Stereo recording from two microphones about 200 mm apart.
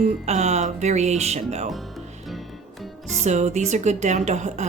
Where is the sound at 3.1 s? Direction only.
35° right (ahead or behind).